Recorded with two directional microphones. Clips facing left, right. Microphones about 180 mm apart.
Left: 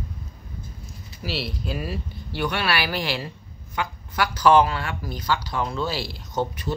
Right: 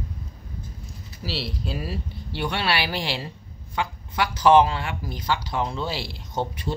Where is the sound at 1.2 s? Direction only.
30° right (ahead or behind).